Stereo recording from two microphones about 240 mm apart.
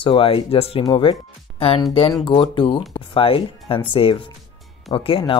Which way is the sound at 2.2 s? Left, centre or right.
Left.